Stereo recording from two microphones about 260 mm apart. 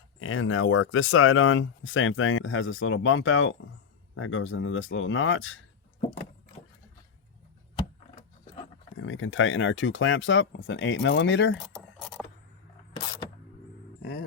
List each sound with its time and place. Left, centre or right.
0.2 s speech: left
9.0 s speech: left
11.6 s keys jangling: centre
14.0 s a sound: left